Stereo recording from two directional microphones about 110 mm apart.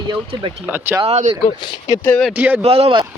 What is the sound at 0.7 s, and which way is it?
Speech, 20° right (ahead or behind).